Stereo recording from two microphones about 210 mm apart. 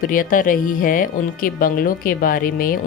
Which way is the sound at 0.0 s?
40° left (ahead or behind).